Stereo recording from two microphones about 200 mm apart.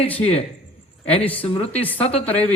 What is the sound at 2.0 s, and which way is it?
Speech, 30° left (ahead or behind).